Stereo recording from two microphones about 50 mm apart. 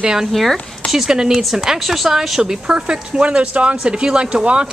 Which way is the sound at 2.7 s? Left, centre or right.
Centre.